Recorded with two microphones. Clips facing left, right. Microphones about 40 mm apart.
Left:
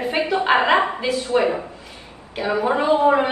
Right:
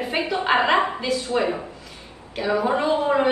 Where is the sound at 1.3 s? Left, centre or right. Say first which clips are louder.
Left 4 dB; left.